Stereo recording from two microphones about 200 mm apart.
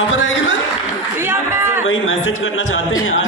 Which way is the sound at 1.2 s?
10° right (ahead or behind).